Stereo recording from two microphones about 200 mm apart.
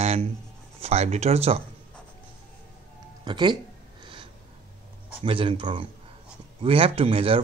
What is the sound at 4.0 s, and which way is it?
Snort, 25° right (ahead or behind).